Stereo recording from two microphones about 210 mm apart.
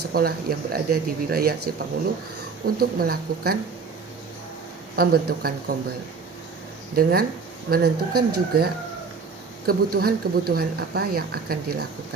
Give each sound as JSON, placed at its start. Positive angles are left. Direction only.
{"t": 0.1, "sound": "speech", "side_deg": -45}
{"t": 2.7, "sound": "speech", "side_deg": -45}
{"t": 4.9, "sound": "speech", "side_deg": -45}
{"t": 6.9, "sound": "speech", "side_deg": -45}